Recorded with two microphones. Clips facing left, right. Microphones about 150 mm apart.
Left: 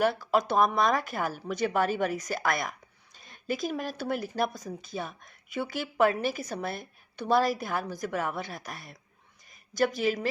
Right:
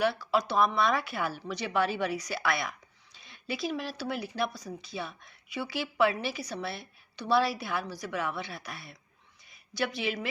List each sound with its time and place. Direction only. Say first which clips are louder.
0.0 s speech: left 2 dB; 45° left (ahead or behind)